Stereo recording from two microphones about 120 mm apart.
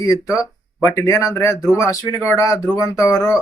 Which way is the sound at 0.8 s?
20° left (ahead or behind).